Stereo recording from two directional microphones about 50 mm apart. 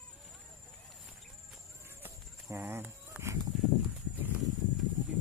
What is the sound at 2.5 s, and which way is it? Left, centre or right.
Speech, right.